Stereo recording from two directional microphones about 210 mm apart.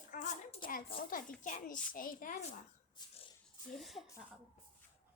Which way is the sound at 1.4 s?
40° left (ahead or behind).